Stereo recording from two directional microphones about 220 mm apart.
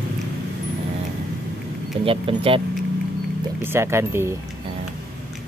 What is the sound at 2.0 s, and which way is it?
Speech, 25° right (ahead or behind).